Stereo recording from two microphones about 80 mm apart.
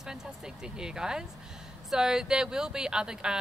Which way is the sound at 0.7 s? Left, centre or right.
Centre.